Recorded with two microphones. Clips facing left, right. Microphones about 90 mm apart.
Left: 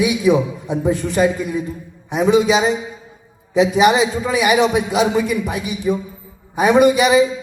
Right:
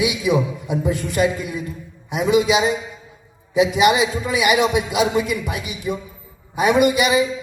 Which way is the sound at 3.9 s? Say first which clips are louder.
Left 2 dB; centre (ahead or behind).